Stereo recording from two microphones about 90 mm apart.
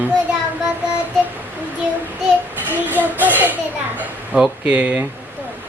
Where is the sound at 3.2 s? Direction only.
20° right (ahead or behind).